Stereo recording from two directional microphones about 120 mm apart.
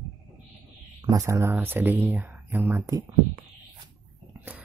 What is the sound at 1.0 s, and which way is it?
Speech, 25° right (ahead or behind).